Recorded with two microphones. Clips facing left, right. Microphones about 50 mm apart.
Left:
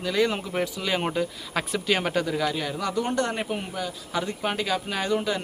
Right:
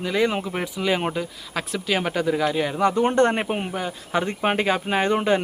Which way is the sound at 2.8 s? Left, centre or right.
Right.